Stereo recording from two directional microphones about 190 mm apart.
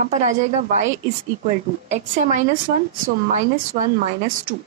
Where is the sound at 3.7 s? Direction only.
40° right (ahead or behind).